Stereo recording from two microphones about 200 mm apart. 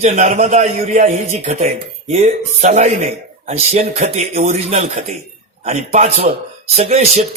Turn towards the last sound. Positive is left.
turn(degrees=-30)  # may be behind; listen again after turning